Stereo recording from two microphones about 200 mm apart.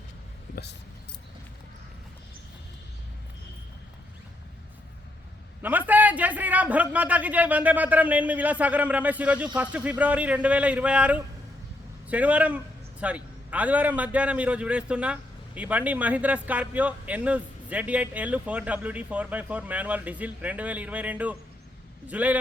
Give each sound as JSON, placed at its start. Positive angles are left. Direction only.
{"t": 0.5, "sound": "speech", "side_deg": 55}
{"t": 5.6, "sound": "a man's voice", "side_deg": -10}